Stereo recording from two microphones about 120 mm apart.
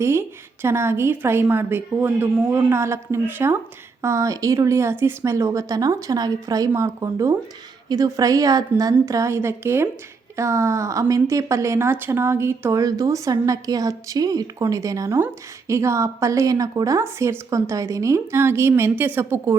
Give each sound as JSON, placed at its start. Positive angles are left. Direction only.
{"t": 0.0, "sound": "a woman's voice", "side_deg": -20}